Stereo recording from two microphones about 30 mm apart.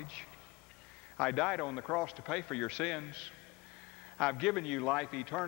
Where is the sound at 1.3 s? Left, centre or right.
Centre.